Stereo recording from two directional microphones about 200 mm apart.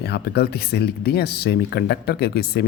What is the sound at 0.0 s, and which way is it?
Speech, 55° left (ahead or behind).